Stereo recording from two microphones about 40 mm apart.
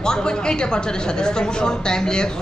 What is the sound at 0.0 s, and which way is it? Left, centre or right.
A woman's voice, centre.